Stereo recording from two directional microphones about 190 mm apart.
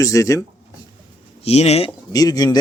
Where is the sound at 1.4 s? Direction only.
35° left (ahead or behind).